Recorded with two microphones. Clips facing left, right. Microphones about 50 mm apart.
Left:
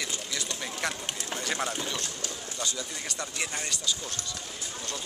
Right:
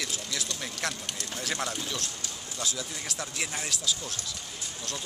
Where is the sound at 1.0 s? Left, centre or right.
Centre.